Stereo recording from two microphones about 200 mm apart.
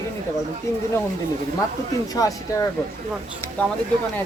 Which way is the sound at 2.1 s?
15° left (ahead or behind).